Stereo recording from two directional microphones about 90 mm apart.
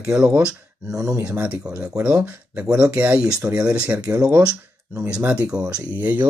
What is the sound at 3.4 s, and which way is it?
Speech, 40° right (ahead or behind).